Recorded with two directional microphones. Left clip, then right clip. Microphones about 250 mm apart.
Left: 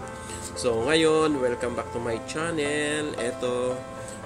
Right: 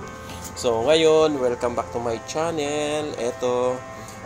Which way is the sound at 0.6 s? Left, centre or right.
Centre.